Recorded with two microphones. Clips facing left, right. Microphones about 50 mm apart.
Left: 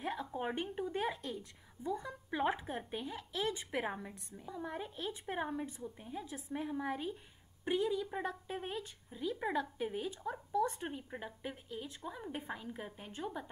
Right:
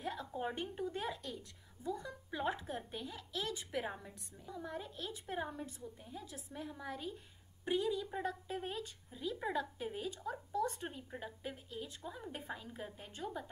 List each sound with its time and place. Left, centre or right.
0.0 s a sound: left
0.7 s a woman's voice: centre
7.6 s speech: centre